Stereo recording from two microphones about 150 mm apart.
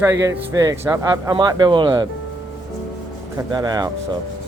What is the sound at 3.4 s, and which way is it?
Speech, 25° right (ahead or behind).